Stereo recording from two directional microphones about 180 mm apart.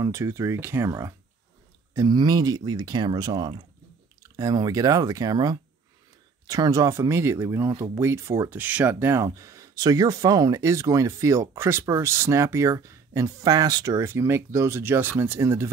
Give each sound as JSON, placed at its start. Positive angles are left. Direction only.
{"t": 0.0, "sound": "speech", "side_deg": -15}